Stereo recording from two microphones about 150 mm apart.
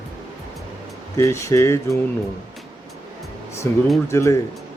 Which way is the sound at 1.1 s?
20° left (ahead or behind).